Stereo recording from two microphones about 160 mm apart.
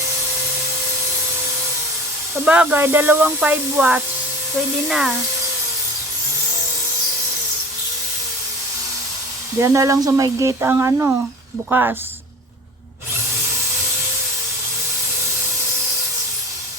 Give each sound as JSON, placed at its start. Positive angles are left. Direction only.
{"t": 2.4, "sound": "speech", "side_deg": -5}
{"t": 9.6, "sound": "speech", "side_deg": -20}